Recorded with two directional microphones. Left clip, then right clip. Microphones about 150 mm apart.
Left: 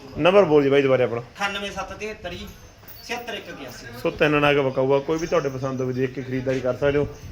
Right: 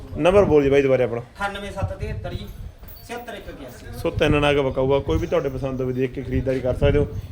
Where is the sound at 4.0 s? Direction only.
15° right (ahead or behind).